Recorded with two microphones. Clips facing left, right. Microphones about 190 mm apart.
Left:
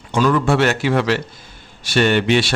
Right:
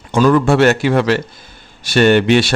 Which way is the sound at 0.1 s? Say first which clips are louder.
Right 4 dB; 45° right (ahead or behind).